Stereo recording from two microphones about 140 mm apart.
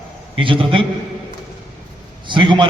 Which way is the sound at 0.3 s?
40° right (ahead or behind).